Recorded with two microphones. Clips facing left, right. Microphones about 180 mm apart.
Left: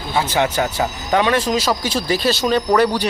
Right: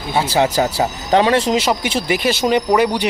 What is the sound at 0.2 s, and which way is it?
Speech, 30° right (ahead or behind).